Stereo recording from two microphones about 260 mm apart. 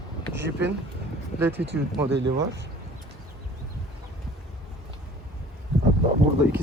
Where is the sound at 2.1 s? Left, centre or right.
Right.